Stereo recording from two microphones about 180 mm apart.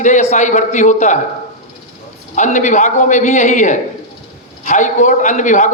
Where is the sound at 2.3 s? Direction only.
40° left (ahead or behind).